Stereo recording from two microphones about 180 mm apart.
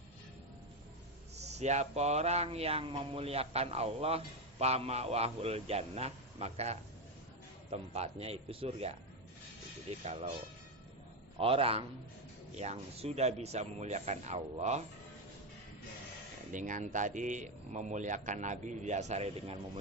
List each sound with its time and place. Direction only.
1.4 s speech: 40° right (ahead or behind)
10.0 s speech: 35° right (ahead or behind)
11.3 s speech: 30° right (ahead or behind)
16.5 s speech: 45° right (ahead or behind)